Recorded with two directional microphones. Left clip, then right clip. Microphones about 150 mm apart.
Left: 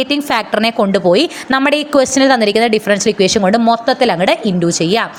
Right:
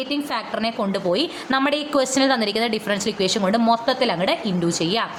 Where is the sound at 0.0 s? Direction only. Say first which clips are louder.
Left 10 dB; 55° left (ahead or behind).